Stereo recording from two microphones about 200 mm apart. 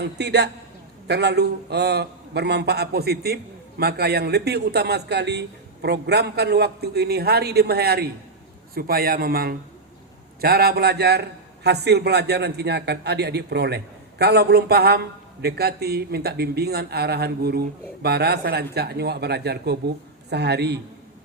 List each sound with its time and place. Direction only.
0.0 s a man's voice: 55° right (ahead or behind)